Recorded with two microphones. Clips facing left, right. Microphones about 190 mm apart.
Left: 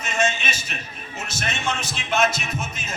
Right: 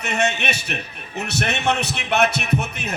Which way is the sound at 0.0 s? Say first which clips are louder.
Right 2 dB; 65° right (ahead or behind).